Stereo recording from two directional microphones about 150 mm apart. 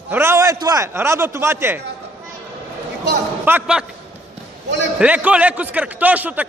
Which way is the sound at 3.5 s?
15° right (ahead or behind).